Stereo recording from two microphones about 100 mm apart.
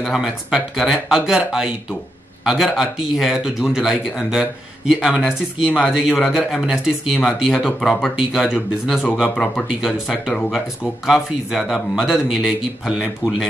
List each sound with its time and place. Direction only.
0.0 s speech: 5° right (ahead or behind)